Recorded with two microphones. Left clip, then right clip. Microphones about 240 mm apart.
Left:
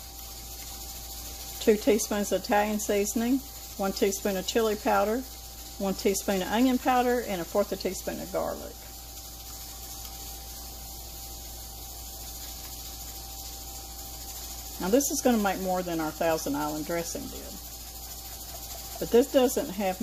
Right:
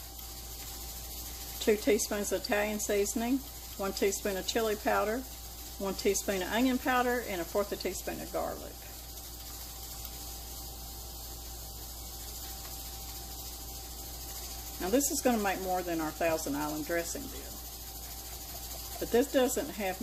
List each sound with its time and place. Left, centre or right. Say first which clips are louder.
1.6 s speech: left 4 dB; left
14.8 s speech: left 5 dB; left
19.1 s speech: left 5 dB; left